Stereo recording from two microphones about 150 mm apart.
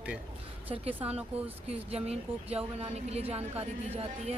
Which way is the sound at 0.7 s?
40° right (ahead or behind).